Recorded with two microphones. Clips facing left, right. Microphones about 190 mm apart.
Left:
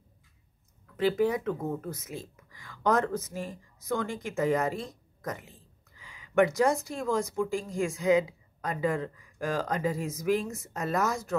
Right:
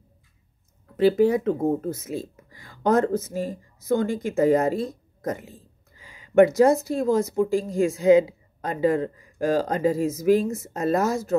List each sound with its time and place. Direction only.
0.8 s speech: 30° right (ahead or behind)